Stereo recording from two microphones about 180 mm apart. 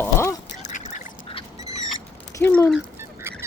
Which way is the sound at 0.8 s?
40° left (ahead or behind).